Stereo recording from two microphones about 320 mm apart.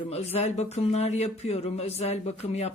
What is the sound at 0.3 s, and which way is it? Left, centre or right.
A woman's voice, centre.